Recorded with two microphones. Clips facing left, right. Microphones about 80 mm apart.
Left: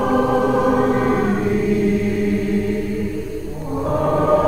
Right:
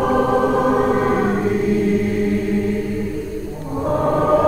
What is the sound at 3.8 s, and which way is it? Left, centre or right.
Choir, centre.